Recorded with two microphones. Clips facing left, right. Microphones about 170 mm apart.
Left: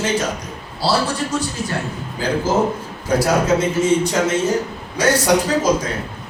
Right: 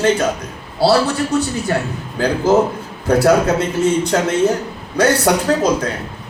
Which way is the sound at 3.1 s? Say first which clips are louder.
Right 5 dB; 60° right (ahead or behind).